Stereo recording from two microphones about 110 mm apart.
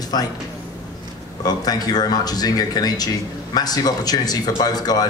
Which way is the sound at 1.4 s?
35° left (ahead or behind).